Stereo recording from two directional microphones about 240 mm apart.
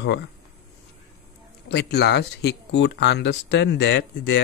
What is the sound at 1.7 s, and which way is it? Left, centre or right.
Speech, left.